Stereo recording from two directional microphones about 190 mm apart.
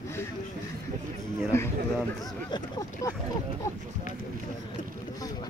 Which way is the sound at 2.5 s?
25° left (ahead or behind).